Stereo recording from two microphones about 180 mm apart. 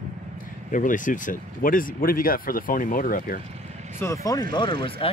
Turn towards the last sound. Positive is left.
turn(degrees=30)  # may be behind; listen again after turning